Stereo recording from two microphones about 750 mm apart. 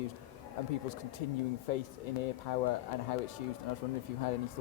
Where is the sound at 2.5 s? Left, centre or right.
Left.